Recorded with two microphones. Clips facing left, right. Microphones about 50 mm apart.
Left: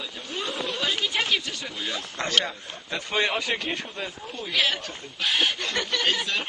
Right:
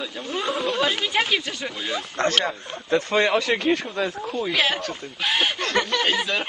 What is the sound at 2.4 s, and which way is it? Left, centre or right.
Speech, right.